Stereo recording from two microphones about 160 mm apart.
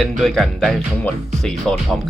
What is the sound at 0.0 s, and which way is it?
Speech, centre (ahead or behind).